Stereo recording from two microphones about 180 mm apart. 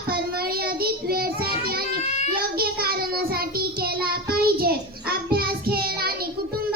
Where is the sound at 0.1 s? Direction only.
55° right (ahead or behind).